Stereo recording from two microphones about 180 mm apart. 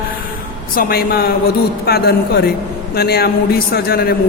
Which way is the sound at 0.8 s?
55° left (ahead or behind).